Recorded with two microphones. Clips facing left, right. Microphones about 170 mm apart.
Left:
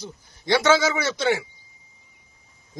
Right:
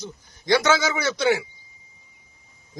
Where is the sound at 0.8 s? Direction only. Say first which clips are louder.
Even; centre (ahead or behind).